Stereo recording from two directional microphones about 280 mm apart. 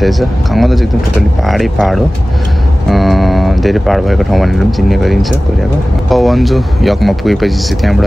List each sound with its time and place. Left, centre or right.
0.0 s speech: centre